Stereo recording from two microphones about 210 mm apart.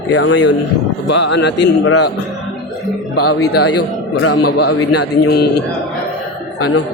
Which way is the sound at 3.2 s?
90° left.